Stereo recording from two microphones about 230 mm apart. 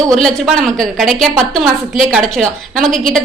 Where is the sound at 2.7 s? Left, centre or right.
Right.